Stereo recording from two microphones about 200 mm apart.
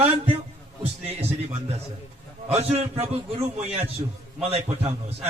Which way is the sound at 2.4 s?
30° right (ahead or behind).